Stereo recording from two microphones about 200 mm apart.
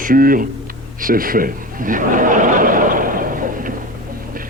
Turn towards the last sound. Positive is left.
turn(degrees=-45)  # may be behind; listen again after turning